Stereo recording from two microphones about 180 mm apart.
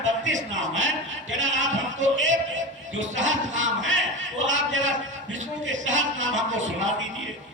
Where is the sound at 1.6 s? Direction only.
90° right.